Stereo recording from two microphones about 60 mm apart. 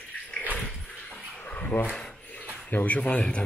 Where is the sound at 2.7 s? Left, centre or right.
Left.